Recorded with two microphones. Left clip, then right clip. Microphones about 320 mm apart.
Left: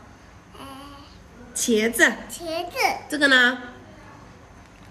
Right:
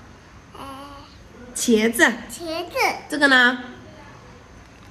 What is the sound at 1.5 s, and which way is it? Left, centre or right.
Speech, centre.